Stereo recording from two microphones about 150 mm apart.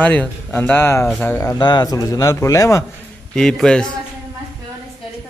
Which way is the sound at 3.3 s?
5° left (ahead or behind).